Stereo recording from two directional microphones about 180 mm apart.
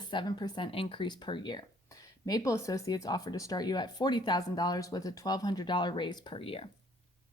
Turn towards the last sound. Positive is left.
turn(degrees=30)  # may be behind; listen again after turning